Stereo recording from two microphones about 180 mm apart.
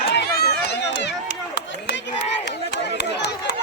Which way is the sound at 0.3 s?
65° left (ahead or behind).